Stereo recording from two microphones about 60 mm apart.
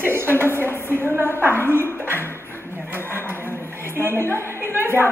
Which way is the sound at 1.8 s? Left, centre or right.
Left.